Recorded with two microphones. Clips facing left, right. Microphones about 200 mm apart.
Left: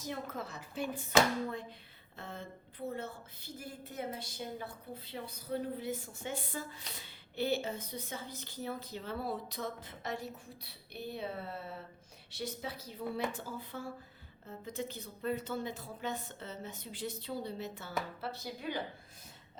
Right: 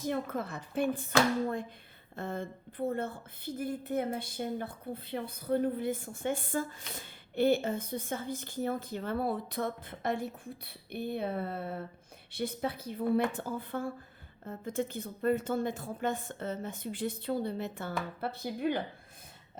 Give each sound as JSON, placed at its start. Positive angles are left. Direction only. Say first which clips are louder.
{"t": 0.0, "sound": "a woman's voice", "louder": "right 7 dB", "side_deg": -55}
{"t": 2.1, "sound": "a woman's voice", "louder": "right 8 dB", "side_deg": -50}